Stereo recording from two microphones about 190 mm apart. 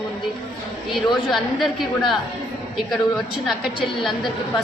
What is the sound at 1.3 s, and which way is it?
Speech, centre (ahead or behind).